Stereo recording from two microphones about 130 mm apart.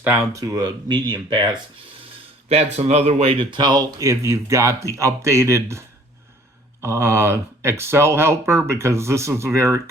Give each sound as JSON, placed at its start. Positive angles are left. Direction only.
{"t": 0.0, "sound": "speech", "side_deg": -15}
{"t": 2.5, "sound": "speech", "side_deg": -50}
{"t": 6.8, "sound": "speech", "side_deg": -20}